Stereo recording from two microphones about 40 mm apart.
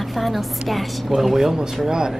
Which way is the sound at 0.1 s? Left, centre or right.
Centre.